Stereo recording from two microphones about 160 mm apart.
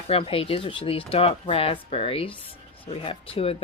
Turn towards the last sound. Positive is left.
turn(degrees=35)  # may be behind; listen again after turning